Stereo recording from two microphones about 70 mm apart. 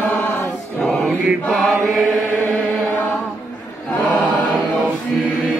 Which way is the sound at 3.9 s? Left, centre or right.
Left.